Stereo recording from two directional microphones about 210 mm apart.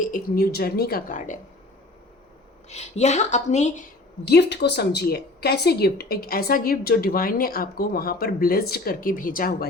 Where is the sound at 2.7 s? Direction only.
30° left (ahead or behind).